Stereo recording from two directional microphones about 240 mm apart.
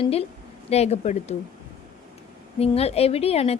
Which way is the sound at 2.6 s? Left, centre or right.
Left.